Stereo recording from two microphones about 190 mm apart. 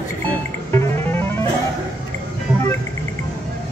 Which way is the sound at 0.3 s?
15° left (ahead or behind).